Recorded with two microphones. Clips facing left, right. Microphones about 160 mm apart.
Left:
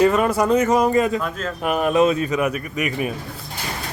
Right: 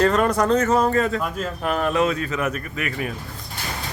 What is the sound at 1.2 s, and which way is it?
Speech, 5° right (ahead or behind).